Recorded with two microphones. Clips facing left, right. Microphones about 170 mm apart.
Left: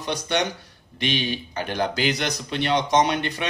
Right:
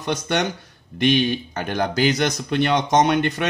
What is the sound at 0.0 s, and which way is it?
Speech, 50° right (ahead or behind).